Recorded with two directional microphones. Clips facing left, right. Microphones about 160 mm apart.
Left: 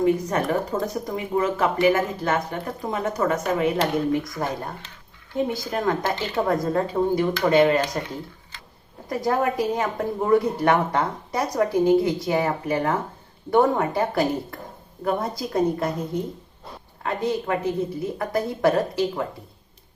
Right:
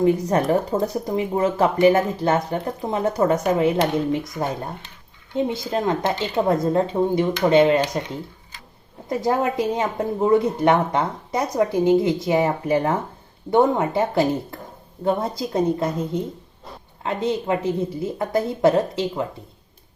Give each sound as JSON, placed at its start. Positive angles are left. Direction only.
{"t": 0.0, "sound": "speech", "side_deg": -30}
{"t": 5.3, "sound": "speech", "side_deg": -25}
{"t": 9.0, "sound": "speech", "side_deg": -25}